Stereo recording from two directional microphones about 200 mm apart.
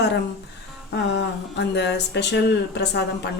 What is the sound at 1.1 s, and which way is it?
A woman's voice, 60° left (ahead or behind).